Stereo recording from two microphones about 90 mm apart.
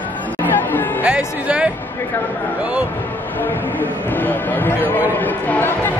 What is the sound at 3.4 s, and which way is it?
Speech, 20° left (ahead or behind).